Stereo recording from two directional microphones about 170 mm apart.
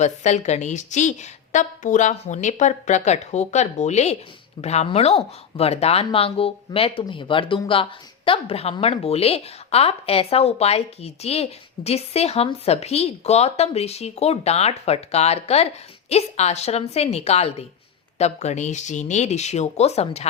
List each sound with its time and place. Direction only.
0.0 s a woman's voice: 45° left (ahead or behind)